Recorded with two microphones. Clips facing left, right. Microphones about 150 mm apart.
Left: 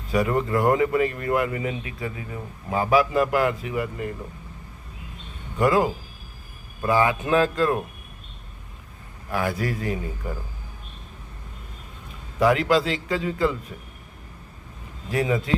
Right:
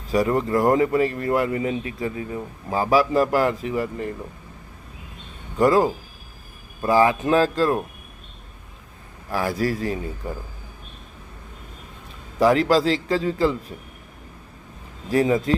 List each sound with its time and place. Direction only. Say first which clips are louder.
0.1 s speech: right 2 dB; 35° right (ahead or behind)
5.5 s speech: right 3 dB; 35° right (ahead or behind)
9.3 s speech: right 2 dB; 35° right (ahead or behind)
12.4 s speech: right 2 dB; 35° right (ahead or behind)
15.1 s speech: right 5 dB; 35° right (ahead or behind)